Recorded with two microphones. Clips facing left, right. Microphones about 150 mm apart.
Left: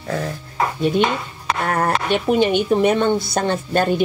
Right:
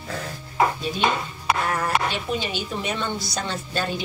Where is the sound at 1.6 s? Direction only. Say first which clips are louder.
Left 5 dB; 55° left (ahead or behind).